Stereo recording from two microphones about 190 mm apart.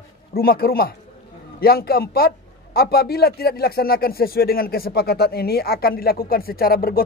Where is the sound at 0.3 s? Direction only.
50° left (ahead or behind).